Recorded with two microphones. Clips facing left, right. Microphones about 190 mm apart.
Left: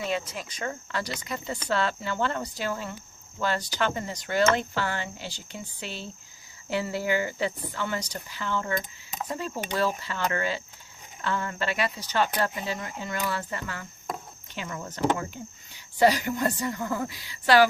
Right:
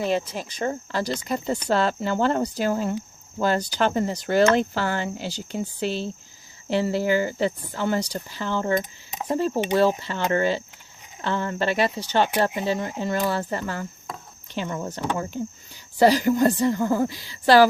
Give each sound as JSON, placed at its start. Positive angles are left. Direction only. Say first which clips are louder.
{"t": 0.1, "sound": "speech", "louder": "right 6 dB", "side_deg": -35}